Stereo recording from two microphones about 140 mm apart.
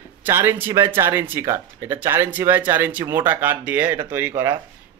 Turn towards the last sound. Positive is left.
turn(degrees=-20)  # may be behind; listen again after turning